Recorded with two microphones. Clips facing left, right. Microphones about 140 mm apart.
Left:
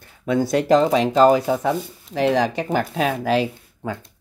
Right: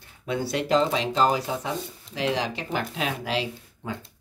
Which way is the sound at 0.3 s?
45° left (ahead or behind).